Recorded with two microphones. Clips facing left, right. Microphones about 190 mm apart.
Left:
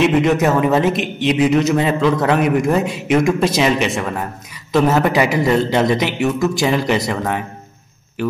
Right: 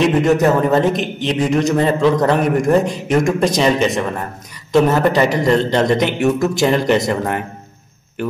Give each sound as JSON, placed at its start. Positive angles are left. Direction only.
{"t": 0.0, "sound": "speech", "side_deg": 0}